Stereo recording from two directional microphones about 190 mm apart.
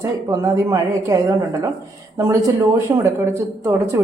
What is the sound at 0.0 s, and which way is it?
Speech, 15° right (ahead or behind).